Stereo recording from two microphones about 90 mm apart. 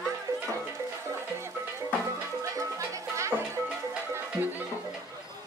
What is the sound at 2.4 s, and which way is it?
Music, 35° right (ahead or behind).